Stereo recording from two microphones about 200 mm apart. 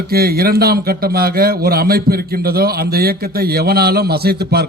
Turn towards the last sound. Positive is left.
turn(degrees=-50)  # may be behind; listen again after turning